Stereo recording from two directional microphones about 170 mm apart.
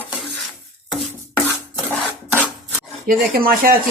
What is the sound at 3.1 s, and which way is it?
Speech, 60° right (ahead or behind).